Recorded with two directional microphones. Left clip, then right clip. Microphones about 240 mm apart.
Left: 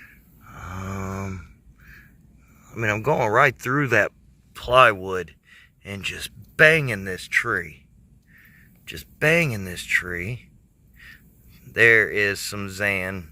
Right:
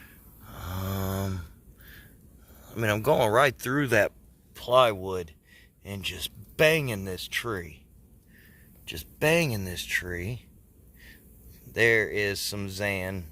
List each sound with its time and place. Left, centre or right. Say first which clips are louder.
0.0 s snoring: left 4 dB; centre
2.6 s speech: left 3 dB; centre
10.9 s a sound: left 7 dB; centre
11.7 s speech: left 7 dB; centre